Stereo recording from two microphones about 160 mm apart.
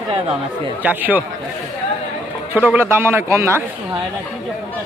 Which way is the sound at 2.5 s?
10° right (ahead or behind).